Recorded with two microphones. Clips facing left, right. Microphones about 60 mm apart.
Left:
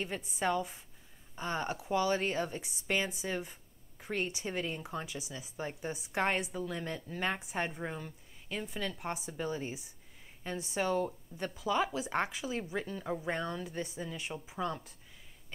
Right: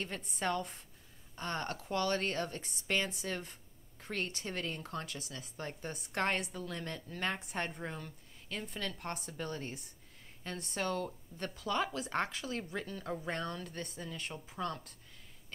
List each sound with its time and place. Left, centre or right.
0.0 s speech: centre